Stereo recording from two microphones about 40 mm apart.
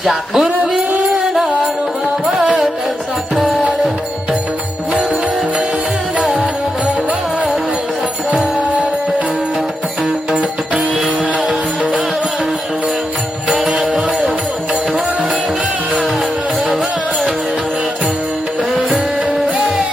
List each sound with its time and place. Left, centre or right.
0.0 s speech: centre
0.8 s music: right
2.3 s music: centre
6.1 s music: right
13.5 s music: centre